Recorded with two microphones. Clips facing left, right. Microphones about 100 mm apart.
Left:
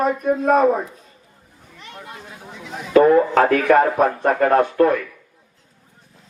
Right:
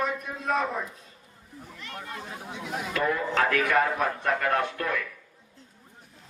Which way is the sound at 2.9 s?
45° left (ahead or behind).